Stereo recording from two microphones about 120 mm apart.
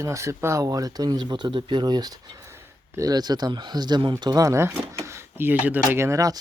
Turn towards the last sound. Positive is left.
turn(degrees=-30)  # may be behind; listen again after turning